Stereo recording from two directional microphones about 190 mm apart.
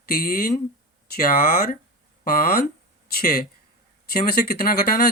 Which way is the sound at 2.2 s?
50° left (ahead or behind).